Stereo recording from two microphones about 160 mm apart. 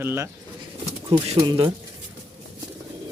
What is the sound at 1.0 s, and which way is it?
Speech, 40° right (ahead or behind).